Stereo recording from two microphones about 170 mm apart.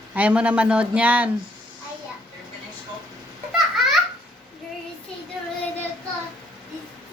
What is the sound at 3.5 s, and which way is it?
Baby laughter, centre (ahead or behind).